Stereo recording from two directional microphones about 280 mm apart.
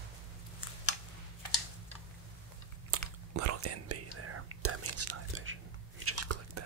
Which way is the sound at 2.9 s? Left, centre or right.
Right.